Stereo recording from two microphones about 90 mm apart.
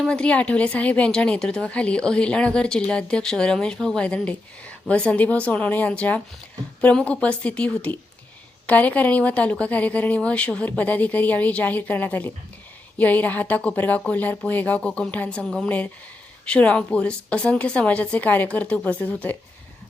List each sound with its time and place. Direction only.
0.0 s a woman's voice: 10° left (ahead or behind)